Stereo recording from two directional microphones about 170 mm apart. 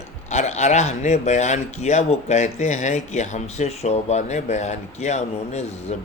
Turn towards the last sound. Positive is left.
turn(degrees=40)  # may be behind; listen again after turning